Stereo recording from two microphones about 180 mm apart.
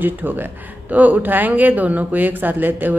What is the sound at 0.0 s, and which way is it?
Speech, 10° right (ahead or behind).